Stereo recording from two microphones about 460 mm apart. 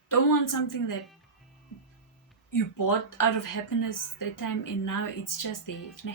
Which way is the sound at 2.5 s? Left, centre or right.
Left.